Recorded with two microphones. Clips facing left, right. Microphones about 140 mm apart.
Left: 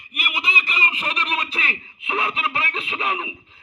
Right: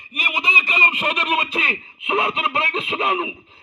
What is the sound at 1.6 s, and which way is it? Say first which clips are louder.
Speech: right 3 dB; 40° right (ahead or behind).